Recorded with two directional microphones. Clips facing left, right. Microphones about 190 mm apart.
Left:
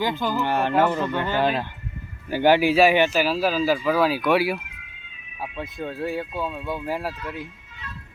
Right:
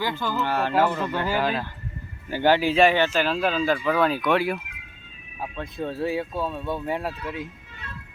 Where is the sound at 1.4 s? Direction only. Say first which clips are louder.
Left 5 dB; 25° left (ahead or behind).